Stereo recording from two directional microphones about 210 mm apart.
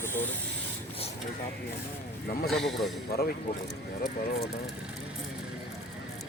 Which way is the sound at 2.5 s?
Centre (ahead or behind).